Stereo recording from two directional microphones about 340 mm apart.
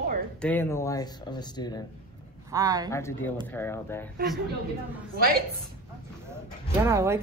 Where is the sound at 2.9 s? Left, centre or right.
Centre.